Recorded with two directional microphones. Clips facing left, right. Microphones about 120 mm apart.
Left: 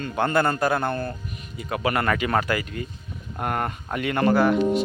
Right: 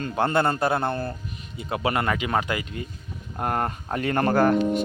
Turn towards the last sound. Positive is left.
turn(degrees=-45)  # may be behind; listen again after turning